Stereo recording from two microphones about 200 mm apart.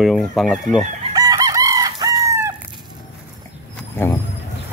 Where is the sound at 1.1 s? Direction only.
20° right (ahead or behind).